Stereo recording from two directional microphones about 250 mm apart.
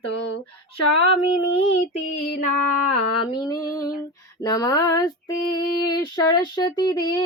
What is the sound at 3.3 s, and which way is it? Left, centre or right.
Child singing, centre.